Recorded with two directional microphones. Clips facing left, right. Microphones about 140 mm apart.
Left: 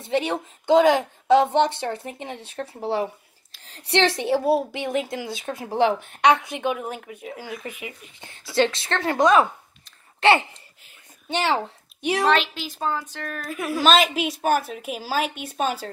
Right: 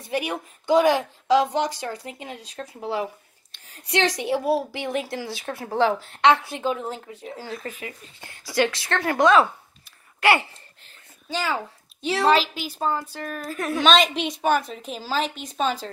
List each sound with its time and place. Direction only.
0.0 s a woman's voice: 25° left (ahead or behind)
1.2 s speech: 60° left (ahead or behind)
1.7 s a woman's voice: 25° left (ahead or behind)
4.1 s a woman's voice: 25° left (ahead or behind)
11.5 s a woman's voice: 15° left (ahead or behind)
12.3 s a woman's voice: 5° right (ahead or behind)